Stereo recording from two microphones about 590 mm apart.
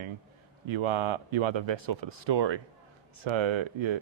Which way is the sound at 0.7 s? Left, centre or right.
Right.